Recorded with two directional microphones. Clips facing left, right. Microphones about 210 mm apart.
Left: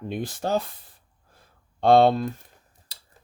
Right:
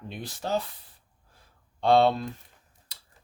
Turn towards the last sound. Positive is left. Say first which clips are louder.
# left 3 dB
turn(degrees=30)  # may be behind; listen again after turning